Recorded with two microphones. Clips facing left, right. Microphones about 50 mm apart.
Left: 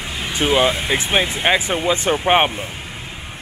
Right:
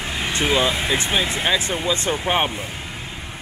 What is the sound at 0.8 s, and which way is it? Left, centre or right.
Speech, centre.